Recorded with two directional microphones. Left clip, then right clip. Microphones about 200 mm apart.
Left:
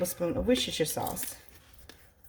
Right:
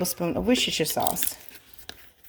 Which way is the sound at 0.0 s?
40° right (ahead or behind).